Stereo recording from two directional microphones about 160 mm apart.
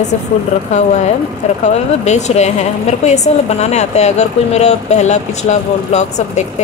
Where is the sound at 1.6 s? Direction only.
45° left (ahead or behind).